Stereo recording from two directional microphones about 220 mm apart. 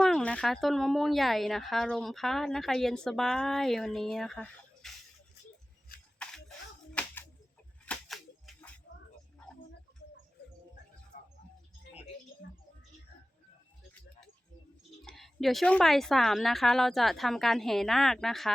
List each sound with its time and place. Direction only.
0.0 s a woman's voice: 5° left (ahead or behind)
6.2 s a sound: 5° left (ahead or behind)
7.9 s typewriter: centre (ahead or behind)
11.1 s music: 40° left (ahead or behind)
11.9 s a sound: 50° left (ahead or behind)
15.0 s a woman's voice: centre (ahead or behind)